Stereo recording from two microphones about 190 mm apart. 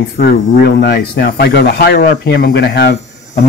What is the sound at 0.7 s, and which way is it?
Speech, 60° left (ahead or behind).